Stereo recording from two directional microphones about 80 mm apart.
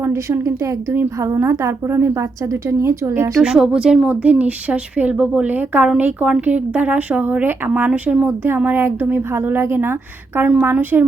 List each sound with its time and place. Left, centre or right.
0.0 s a woman's voice: right
3.4 s a woman's voice: centre